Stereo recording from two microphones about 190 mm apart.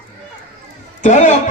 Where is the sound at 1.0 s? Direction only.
40° left (ahead or behind).